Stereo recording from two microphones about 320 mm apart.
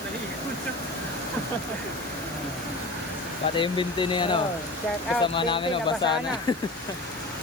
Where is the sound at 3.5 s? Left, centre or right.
Centre.